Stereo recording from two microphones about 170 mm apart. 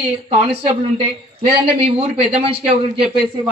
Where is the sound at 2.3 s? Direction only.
35° right (ahead or behind).